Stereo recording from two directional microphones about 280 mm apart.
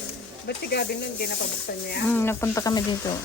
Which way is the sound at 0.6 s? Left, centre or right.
Left.